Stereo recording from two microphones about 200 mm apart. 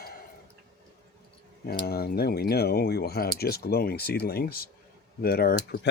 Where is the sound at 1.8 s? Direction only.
50° left (ahead or behind).